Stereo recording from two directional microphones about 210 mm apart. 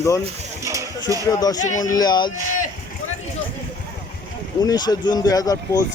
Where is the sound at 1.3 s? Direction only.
20° left (ahead or behind).